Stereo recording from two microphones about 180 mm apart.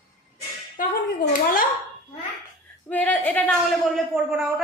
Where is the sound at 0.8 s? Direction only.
50° left (ahead or behind).